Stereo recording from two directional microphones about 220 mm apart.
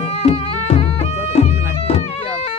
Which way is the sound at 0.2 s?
30° left (ahead or behind).